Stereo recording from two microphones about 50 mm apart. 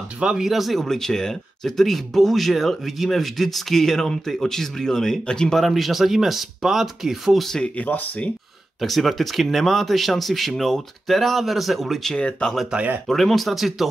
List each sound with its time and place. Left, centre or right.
0.2 s speech: centre
0.5 s speech: centre
5.6 s speech: centre
7.7 s speech: left
8.8 s speech: centre
12.2 s speech: left
13.1 s speech: centre